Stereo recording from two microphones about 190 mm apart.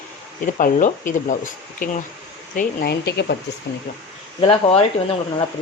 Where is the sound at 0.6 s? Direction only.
45° left (ahead or behind).